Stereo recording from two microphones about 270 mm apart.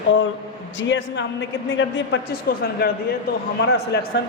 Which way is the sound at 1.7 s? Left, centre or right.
Left.